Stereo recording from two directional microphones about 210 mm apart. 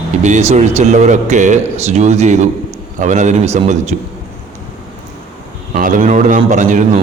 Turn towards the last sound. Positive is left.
turn(degrees=-35)  # may be behind; listen again after turning